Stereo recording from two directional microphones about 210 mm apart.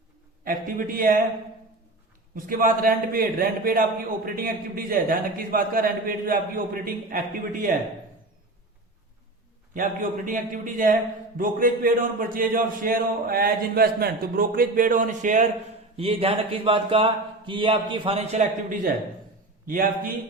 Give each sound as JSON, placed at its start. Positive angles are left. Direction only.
{"t": 0.4, "sound": "a man's voice", "side_deg": -40}
{"t": 2.3, "sound": "a man's voice", "side_deg": -40}
{"t": 9.7, "sound": "a man's voice", "side_deg": -40}